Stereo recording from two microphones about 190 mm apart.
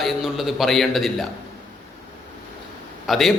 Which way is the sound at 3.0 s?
Centre (ahead or behind).